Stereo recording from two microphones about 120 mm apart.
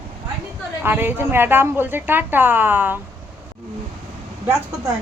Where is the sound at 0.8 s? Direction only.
15° right (ahead or behind).